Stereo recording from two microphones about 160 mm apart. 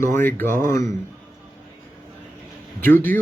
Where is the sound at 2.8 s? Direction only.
10° left (ahead or behind).